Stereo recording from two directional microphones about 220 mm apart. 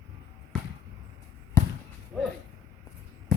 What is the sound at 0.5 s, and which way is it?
Basketball bounce, centre (ahead or behind).